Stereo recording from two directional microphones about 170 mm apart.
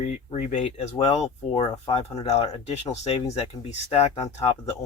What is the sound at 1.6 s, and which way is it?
Speech, 20° left (ahead or behind).